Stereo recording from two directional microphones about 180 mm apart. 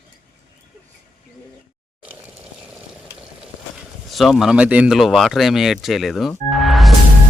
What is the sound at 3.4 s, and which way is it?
Speech, centre (ahead or behind).